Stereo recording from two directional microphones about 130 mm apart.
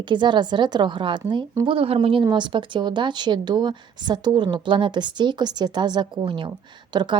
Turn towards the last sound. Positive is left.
turn(degrees=-35)  # may be behind; listen again after turning